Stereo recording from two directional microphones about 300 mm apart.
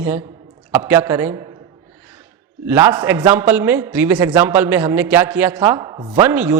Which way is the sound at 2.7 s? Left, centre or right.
Centre.